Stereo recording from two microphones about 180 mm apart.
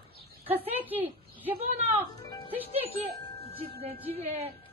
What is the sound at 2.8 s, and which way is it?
Speech, 35° right (ahead or behind).